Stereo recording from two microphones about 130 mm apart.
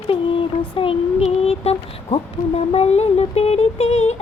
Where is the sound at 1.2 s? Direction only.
50° left (ahead or behind).